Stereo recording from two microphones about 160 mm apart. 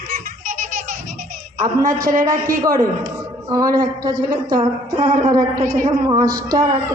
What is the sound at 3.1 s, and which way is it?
A woman's voice, 20° right (ahead or behind).